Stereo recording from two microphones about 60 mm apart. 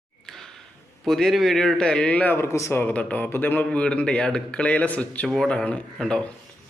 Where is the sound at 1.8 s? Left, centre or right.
Centre.